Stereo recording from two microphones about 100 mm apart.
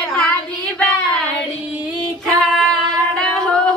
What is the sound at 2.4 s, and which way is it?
Singing, 5° left (ahead or behind).